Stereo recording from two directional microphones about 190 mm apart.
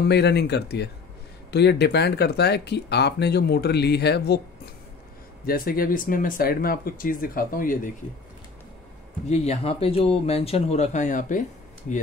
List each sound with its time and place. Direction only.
0.1 s speech: 60° left (ahead or behind)
5.5 s speech: 50° left (ahead or behind)
9.3 s speech: 35° left (ahead or behind)